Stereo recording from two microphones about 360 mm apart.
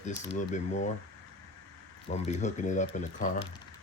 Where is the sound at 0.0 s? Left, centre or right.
Centre.